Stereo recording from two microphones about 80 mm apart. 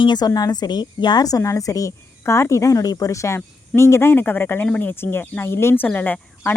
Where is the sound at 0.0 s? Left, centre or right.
Left.